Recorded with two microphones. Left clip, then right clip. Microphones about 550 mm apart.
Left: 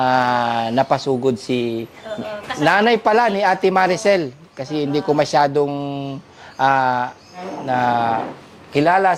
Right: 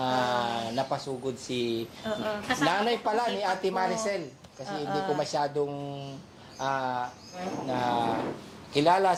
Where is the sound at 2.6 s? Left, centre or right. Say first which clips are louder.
Left 14 dB; left.